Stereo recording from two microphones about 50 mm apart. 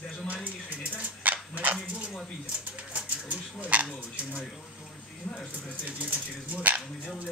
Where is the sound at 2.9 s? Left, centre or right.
Right.